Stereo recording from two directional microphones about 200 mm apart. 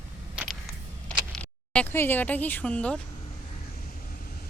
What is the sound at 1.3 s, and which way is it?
Speech, 5° left (ahead or behind).